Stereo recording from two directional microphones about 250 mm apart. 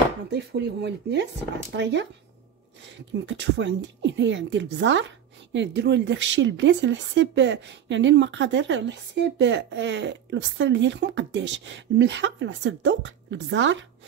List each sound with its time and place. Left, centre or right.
0.3 s speech: right
3.1 s speech: right